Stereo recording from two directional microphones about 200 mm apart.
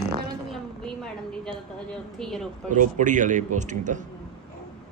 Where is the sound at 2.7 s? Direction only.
40° right (ahead or behind).